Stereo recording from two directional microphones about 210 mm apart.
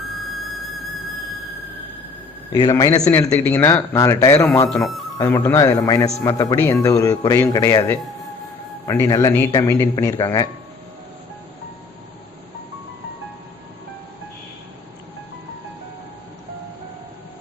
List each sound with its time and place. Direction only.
2.5 s a man's voice: 20° left (ahead or behind)
4.7 s speech: centre (ahead or behind)
5.1 s a man's voice: 15° left (ahead or behind)